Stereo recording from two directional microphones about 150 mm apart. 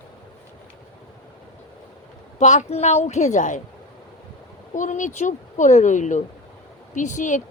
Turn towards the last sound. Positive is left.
turn(degrees=55)  # may be behind; listen again after turning